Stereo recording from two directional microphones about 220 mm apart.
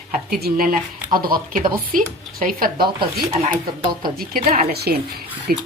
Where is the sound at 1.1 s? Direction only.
40° right (ahead or behind).